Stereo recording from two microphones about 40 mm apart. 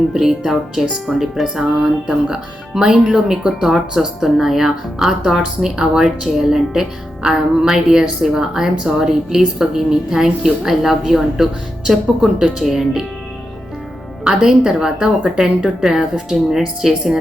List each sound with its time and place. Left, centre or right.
0.1 s a woman's voice: centre
14.3 s a woman's voice: centre